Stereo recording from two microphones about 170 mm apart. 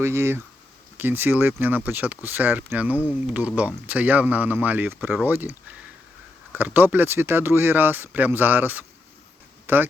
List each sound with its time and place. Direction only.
0.0 s speech: 15° right (ahead or behind)